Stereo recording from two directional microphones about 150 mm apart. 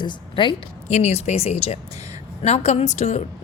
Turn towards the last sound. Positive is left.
turn(degrees=50)  # may be behind; listen again after turning